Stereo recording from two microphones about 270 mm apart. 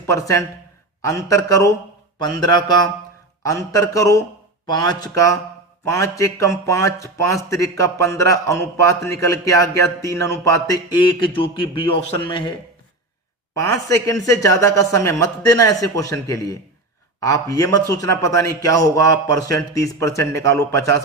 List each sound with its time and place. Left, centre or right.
0.0 s a man's voice: centre
13.6 s speech: centre